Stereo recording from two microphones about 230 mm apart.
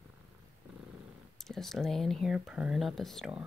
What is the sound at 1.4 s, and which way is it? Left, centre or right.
Speech, centre.